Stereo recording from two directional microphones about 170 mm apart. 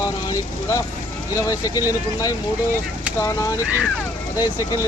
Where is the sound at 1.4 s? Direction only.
20° left (ahead or behind).